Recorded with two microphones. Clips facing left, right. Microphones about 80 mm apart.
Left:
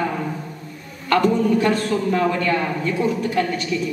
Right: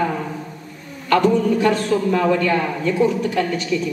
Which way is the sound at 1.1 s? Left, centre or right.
Left.